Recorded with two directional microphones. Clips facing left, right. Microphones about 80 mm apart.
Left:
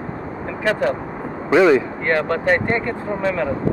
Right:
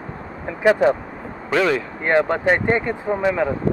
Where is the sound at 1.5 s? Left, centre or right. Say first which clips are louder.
Left 6 dB; centre.